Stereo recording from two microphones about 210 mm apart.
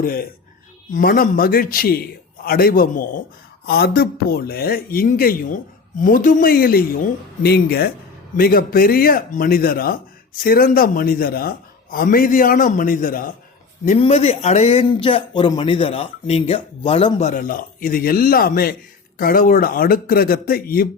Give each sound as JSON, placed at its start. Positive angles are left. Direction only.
{"t": 0.0, "sound": "a man's voice", "side_deg": 45}